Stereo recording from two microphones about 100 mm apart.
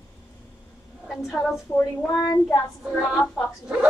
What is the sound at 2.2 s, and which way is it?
Child singing, 40° left (ahead or behind).